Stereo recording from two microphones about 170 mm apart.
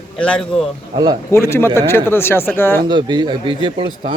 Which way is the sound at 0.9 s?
25° right (ahead or behind).